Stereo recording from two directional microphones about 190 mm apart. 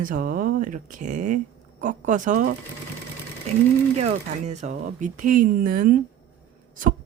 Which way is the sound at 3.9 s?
35° right (ahead or behind).